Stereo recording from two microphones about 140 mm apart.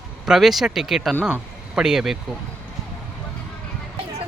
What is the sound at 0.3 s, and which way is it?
Speech, centre (ahead or behind).